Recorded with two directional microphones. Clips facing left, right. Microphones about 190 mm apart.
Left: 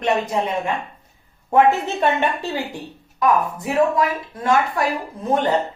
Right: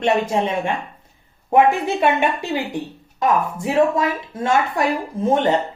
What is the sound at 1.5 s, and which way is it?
A woman's voice, 15° right (ahead or behind).